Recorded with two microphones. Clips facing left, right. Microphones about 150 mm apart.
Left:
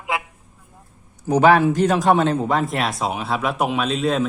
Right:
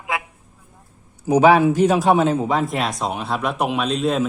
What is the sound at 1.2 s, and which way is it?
A man's voice, 10° right (ahead or behind).